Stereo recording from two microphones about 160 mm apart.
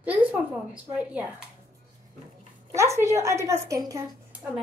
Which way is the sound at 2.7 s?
20° right (ahead or behind).